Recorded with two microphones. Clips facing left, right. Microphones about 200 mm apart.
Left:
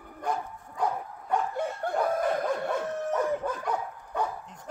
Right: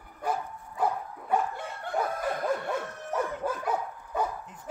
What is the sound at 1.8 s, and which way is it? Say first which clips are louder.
Snicker: left 1 dB; 40° left (ahead or behind).